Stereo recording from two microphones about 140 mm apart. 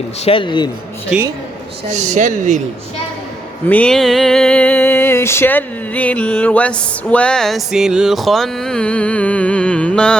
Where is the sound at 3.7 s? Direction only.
10° left (ahead or behind).